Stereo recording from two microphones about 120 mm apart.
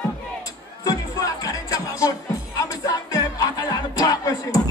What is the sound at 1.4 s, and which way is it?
Music, 30° left (ahead or behind).